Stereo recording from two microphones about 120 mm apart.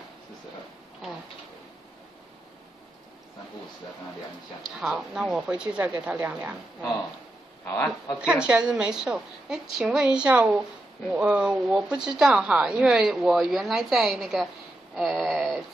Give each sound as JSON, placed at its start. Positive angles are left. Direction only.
{"t": 4.6, "sound": "a woman's voice", "side_deg": -5}
{"t": 7.6, "sound": "a man's voice", "side_deg": 20}
{"t": 8.2, "sound": "a woman's voice", "side_deg": -10}